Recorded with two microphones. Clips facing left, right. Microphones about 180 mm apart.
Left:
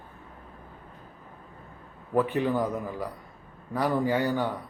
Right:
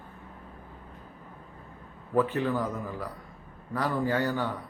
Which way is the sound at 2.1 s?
15° left (ahead or behind).